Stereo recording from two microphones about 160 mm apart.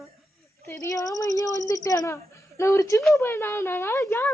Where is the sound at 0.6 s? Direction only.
20° left (ahead or behind).